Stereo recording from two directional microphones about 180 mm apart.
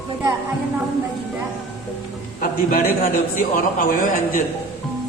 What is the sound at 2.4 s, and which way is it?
A man's voice, 50° left (ahead or behind).